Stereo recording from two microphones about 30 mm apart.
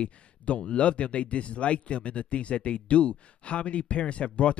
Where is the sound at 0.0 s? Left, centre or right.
Left.